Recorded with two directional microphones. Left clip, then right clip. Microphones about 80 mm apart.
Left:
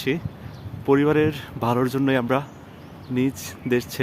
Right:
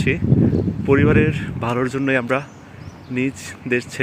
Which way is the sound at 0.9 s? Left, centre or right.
Left.